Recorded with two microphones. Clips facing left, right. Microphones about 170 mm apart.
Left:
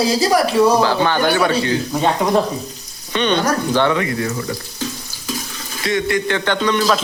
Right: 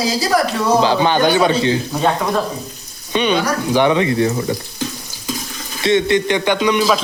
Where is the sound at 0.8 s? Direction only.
20° right (ahead or behind).